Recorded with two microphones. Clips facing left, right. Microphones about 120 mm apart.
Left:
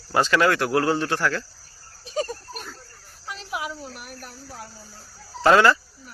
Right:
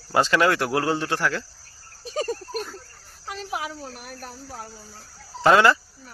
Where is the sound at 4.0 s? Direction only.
45° right (ahead or behind).